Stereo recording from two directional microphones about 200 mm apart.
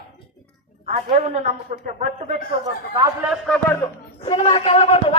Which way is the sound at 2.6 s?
15° right (ahead or behind).